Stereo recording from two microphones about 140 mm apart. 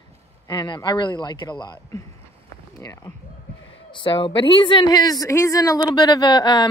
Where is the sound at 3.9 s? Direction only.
35° left (ahead or behind).